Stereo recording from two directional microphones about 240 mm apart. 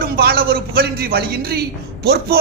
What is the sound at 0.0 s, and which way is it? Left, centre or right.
A man's voice, right.